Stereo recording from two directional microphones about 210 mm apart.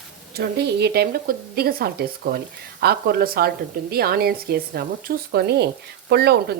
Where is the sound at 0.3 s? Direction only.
50° right (ahead or behind).